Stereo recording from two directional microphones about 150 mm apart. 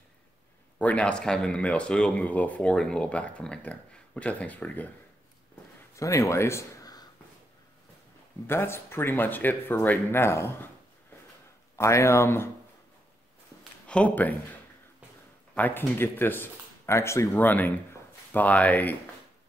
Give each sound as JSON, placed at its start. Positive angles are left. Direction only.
{"t": 0.7, "sound": "speech", "side_deg": 10}
{"t": 5.9, "sound": "speech", "side_deg": 20}
{"t": 8.5, "sound": "speech", "side_deg": 15}
{"t": 11.7, "sound": "speech", "side_deg": 20}
{"t": 13.8, "sound": "speech", "side_deg": 10}
{"t": 15.5, "sound": "speech", "side_deg": 15}